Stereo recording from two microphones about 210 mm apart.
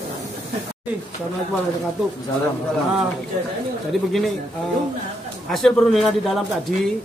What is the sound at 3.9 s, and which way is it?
Speech, centre (ahead or behind).